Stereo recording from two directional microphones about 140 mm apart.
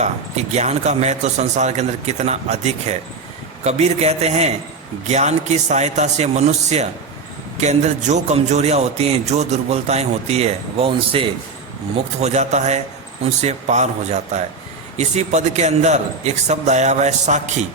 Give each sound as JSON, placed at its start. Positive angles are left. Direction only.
{"t": 0.0, "sound": "a man's voice", "side_deg": -50}
{"t": 12.2, "sound": "a man's voice", "side_deg": -55}